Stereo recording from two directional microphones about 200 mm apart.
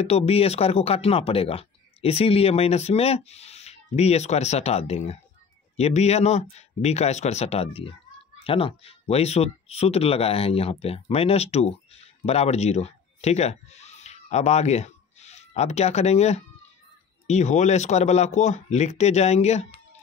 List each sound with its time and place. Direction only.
0.0 s speech: 30° left (ahead or behind)